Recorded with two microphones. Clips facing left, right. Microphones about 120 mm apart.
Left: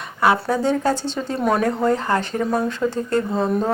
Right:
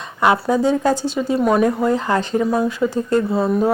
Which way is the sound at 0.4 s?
15° right (ahead or behind).